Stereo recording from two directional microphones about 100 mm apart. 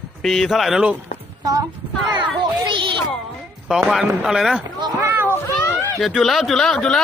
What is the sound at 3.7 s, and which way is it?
Speech, 5° right (ahead or behind).